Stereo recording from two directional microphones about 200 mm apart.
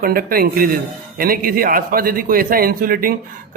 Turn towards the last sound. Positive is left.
turn(degrees=-45)  # may be behind; listen again after turning